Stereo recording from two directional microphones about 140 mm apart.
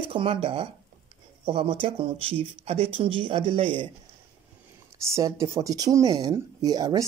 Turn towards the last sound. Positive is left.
turn(degrees=-25)  # may be behind; listen again after turning